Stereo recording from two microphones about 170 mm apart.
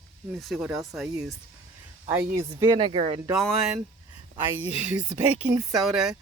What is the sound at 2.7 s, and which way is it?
Speech, 35° right (ahead or behind).